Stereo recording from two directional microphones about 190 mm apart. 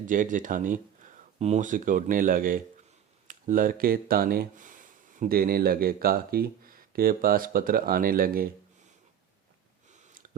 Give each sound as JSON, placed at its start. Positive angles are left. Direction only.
{"t": 0.0, "sound": "speech", "side_deg": -45}